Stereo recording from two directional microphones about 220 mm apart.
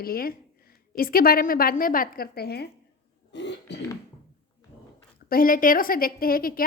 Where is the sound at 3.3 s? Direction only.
55° left (ahead or behind).